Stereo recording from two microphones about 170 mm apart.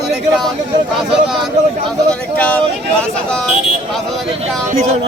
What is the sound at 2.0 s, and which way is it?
Speech, 10° left (ahead or behind).